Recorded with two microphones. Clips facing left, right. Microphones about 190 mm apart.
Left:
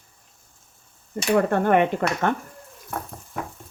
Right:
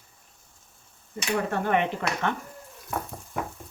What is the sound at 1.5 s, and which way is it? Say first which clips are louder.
Speech: left 6 dB; 55° left (ahead or behind).